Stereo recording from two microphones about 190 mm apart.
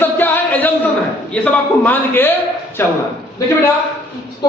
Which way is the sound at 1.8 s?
10° left (ahead or behind).